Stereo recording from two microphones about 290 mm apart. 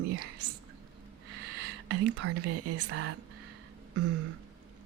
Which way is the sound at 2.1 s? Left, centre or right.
Right.